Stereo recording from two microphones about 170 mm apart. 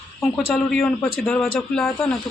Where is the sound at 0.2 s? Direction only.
5° left (ahead or behind).